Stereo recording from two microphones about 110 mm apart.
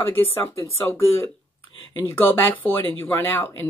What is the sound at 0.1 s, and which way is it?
Speech, 20° left (ahead or behind).